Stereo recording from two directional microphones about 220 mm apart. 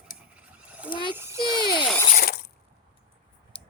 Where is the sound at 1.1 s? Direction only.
10° right (ahead or behind).